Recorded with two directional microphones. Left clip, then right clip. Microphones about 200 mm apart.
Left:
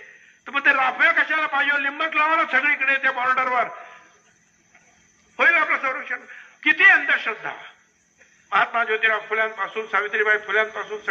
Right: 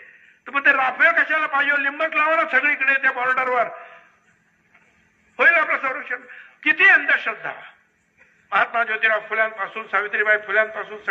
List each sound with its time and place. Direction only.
0.4 s a man's voice: 35° right (ahead or behind)
5.3 s a man's voice: 35° right (ahead or behind)